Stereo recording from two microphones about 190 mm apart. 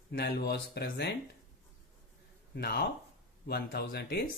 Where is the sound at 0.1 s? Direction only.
55° left (ahead or behind).